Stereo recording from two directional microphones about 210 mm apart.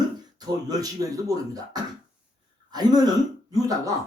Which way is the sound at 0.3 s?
15° right (ahead or behind).